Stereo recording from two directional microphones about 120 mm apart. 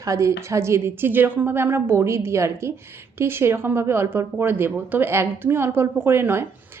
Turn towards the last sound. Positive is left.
turn(degrees=-20)  # may be behind; listen again after turning